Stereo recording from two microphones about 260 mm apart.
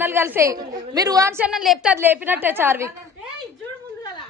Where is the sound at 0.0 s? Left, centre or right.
Centre.